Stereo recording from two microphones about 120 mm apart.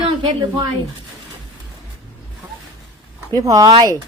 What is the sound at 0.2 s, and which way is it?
Speech, 35° right (ahead or behind).